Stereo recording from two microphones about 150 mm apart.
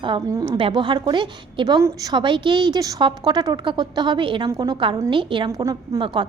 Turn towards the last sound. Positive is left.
turn(degrees=-30)  # may be behind; listen again after turning